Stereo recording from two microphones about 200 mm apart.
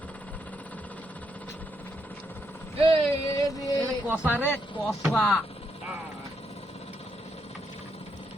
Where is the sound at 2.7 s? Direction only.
30° right (ahead or behind).